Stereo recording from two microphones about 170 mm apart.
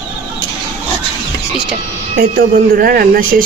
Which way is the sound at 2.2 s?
55° right (ahead or behind).